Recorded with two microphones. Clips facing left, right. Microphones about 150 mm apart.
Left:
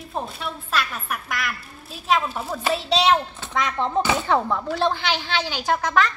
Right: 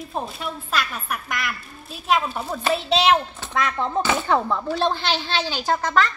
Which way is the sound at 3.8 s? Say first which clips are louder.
Left 1 dB; 25° left (ahead or behind).